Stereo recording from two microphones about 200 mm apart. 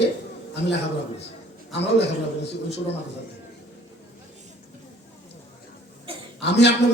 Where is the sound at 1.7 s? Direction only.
60° left (ahead or behind).